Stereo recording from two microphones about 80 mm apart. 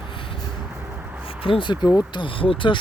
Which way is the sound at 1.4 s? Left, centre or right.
Left.